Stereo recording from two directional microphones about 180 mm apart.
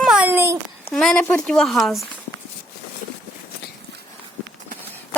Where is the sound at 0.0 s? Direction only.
5° right (ahead or behind).